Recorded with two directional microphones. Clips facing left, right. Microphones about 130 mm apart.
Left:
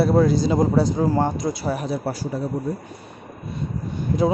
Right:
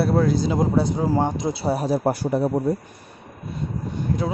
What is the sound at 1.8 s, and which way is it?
Speech, 45° right (ahead or behind).